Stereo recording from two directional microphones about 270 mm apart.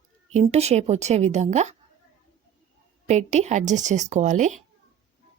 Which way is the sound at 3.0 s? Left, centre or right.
Right.